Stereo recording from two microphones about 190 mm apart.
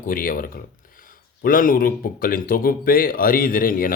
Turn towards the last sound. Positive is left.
turn(degrees=50)  # may be behind; listen again after turning